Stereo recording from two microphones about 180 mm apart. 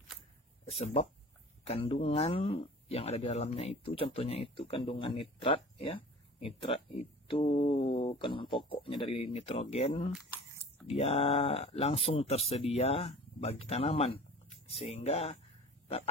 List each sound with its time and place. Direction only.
0.7 s speech: 35° left (ahead or behind)